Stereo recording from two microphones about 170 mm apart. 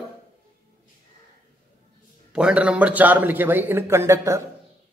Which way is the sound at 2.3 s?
5° right (ahead or behind).